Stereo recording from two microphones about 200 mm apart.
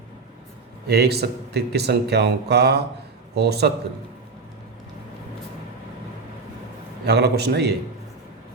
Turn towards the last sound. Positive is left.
turn(degrees=-55)  # may be behind; listen again after turning